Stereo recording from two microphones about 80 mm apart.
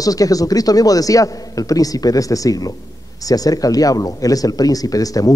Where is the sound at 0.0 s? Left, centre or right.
Left.